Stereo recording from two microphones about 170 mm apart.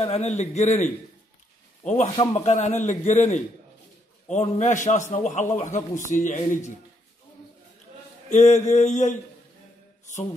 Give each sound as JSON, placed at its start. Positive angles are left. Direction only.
{"t": 0.0, "sound": "a man's voice", "side_deg": 40}
{"t": 2.1, "sound": "a man's voice", "side_deg": 40}
{"t": 8.3, "sound": "a man's voice", "side_deg": 45}